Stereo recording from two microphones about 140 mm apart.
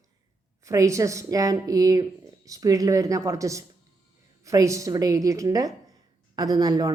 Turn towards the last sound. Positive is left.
turn(degrees=-25)  # may be behind; listen again after turning